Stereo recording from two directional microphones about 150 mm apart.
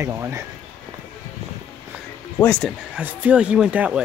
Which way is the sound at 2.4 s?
5° left (ahead or behind).